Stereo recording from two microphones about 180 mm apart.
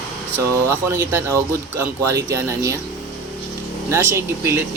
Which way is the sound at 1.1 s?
15° right (ahead or behind).